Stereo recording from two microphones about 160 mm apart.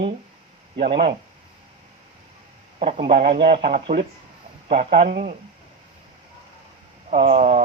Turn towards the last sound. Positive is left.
turn(degrees=-45)  # may be behind; listen again after turning